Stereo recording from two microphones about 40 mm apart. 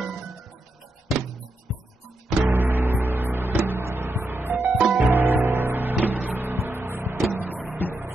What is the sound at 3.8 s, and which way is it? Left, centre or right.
Music, right.